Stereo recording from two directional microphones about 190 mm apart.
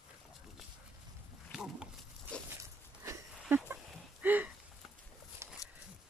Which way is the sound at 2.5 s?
15° right (ahead or behind).